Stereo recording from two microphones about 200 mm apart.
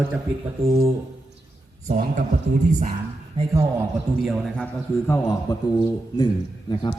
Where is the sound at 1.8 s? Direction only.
40° right (ahead or behind).